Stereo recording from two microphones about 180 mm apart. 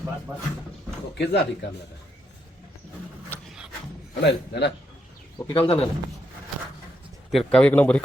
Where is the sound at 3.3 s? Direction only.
10° left (ahead or behind).